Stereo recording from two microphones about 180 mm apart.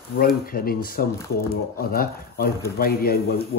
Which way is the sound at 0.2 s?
55° left (ahead or behind).